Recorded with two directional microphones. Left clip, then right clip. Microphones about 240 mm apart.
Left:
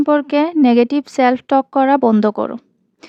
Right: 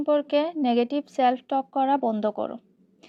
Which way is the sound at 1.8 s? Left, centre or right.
Left.